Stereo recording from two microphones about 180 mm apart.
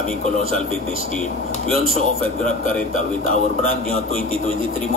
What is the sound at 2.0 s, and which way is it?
Speech, 45° left (ahead or behind).